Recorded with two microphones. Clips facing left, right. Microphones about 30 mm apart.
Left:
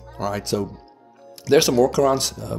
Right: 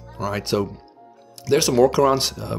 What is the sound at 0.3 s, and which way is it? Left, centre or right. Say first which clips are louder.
Speech: right 1 dB; right.